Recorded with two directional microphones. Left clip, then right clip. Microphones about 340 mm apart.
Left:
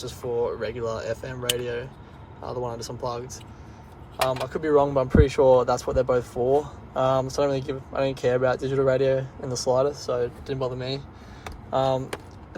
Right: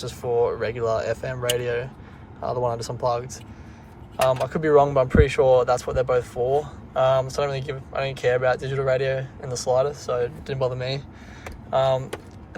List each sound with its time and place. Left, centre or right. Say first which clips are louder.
0.0 s speech: right 4 dB; centre